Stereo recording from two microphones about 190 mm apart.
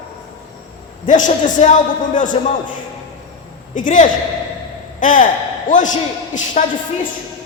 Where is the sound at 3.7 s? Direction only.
45° left (ahead or behind).